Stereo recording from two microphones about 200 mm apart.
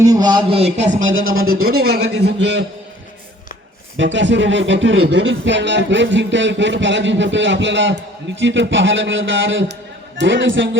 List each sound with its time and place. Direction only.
0.0 s speech: 20° right (ahead or behind)
0.9 s a man's voice: 80° right
1.6 s speech: 50° right (ahead or behind)
3.9 s a man's voice: 65° right (ahead or behind)